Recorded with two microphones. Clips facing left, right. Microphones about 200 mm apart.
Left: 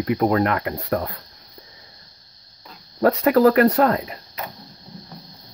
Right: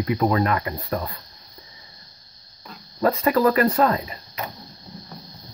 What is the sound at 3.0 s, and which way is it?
Speech, 65° left (ahead or behind).